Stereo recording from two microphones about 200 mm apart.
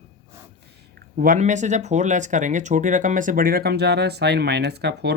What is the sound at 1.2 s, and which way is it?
Speech, 40° right (ahead or behind).